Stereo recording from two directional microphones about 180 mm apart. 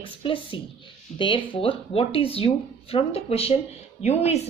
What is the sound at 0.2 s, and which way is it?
Speech, 30° left (ahead or behind).